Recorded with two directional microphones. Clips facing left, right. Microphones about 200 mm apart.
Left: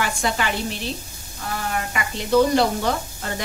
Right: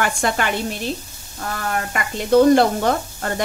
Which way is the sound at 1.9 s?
50° right (ahead or behind).